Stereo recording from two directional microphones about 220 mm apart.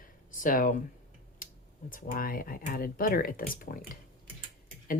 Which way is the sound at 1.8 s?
40° left (ahead or behind).